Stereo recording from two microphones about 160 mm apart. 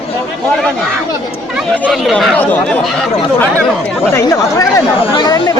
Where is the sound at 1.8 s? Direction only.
Centre (ahead or behind).